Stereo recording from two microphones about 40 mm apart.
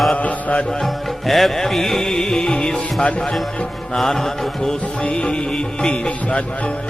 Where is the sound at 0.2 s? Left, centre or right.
Left.